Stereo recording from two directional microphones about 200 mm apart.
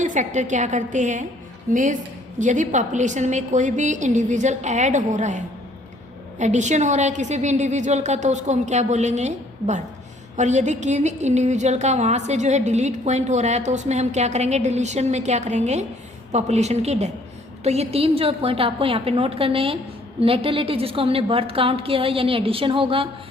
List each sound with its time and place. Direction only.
0.0 s a woman's voice: 40° right (ahead or behind)
6.4 s a woman's voice: 35° right (ahead or behind)